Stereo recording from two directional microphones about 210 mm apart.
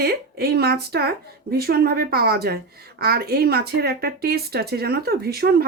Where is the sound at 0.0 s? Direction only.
45° right (ahead or behind).